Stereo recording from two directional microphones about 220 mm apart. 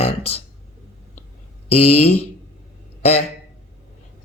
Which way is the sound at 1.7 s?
25° left (ahead or behind).